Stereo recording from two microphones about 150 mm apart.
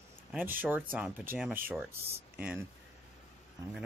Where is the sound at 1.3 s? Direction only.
70° right (ahead or behind).